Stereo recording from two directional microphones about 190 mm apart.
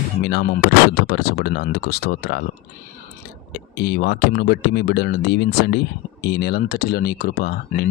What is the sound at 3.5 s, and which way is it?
Speech, 55° left (ahead or behind).